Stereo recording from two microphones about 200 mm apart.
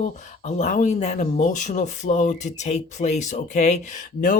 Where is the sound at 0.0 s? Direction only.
35° left (ahead or behind).